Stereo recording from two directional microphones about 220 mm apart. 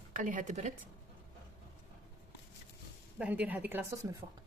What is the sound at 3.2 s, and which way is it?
Speech, 5° right (ahead or behind).